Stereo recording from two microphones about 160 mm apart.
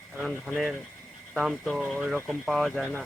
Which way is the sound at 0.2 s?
5° left (ahead or behind).